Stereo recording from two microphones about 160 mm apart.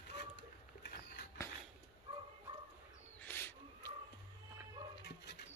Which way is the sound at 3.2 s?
15° left (ahead or behind).